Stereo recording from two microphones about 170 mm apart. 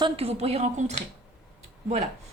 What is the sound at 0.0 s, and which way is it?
Speech, 35° right (ahead or behind).